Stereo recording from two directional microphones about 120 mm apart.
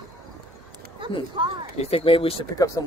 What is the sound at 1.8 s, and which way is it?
Speech, 50° left (ahead or behind).